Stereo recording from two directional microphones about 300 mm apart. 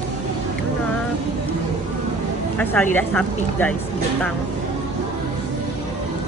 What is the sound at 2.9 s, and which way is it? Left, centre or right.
Speech, centre.